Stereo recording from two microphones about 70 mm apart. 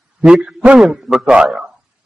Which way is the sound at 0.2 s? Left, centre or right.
Centre.